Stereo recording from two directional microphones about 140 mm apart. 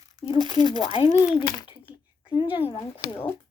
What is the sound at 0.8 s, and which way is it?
Speech, 45° left (ahead or behind).